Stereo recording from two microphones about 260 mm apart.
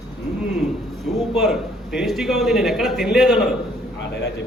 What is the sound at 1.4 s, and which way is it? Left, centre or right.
A man's voice, centre.